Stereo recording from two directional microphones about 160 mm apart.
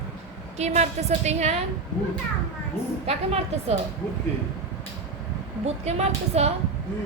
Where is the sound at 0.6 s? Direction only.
45° right (ahead or behind).